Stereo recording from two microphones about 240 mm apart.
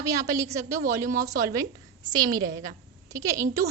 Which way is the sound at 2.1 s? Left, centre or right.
Centre.